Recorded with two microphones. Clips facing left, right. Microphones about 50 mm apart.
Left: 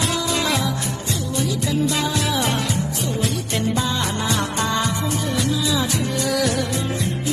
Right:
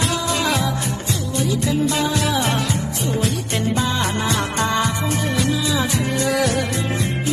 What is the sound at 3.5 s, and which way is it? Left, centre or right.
Music, right.